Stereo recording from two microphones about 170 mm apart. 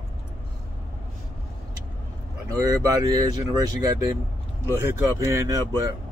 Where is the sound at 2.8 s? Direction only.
20° right (ahead or behind).